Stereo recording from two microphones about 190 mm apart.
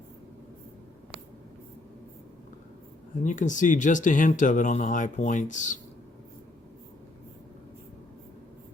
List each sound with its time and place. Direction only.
3.2 s speech: 40° left (ahead or behind)